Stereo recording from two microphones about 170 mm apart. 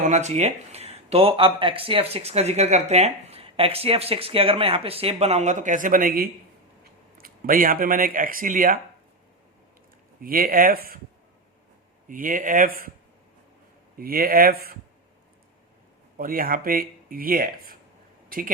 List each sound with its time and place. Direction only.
0.0 s speech: 45° right (ahead or behind)
10.2 s speech: 55° right (ahead or behind)
12.0 s speech: 55° right (ahead or behind)
14.0 s speech: 60° right (ahead or behind)
16.1 s speech: 55° right (ahead or behind)